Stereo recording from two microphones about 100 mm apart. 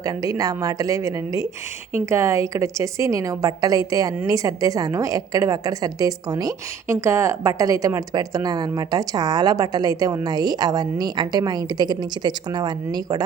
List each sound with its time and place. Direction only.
0.0 s a woman's voice: 35° right (ahead or behind)